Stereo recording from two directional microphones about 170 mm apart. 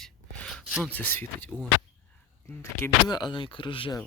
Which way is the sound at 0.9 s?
10° left (ahead or behind).